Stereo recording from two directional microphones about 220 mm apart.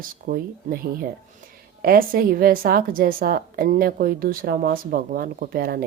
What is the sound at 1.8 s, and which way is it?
A woman's voice, 40° right (ahead or behind).